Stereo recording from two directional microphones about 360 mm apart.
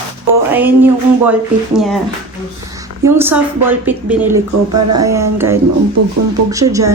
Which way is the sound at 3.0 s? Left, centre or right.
Centre.